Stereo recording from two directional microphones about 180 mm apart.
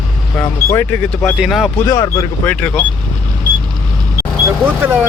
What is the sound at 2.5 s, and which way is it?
Speech, 10° left (ahead or behind).